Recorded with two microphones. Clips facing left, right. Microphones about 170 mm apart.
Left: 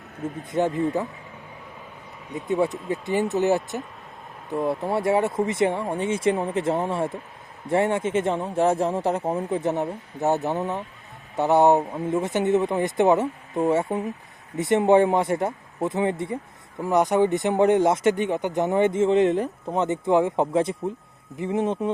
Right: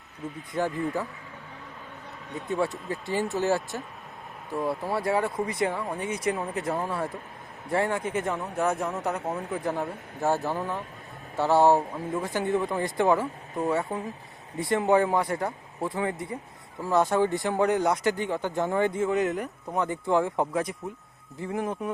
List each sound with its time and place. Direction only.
0.5 s speech: 20° left (ahead or behind)
2.3 s speech: 20° left (ahead or behind)